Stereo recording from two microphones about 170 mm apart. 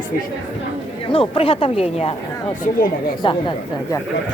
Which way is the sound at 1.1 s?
35° left (ahead or behind).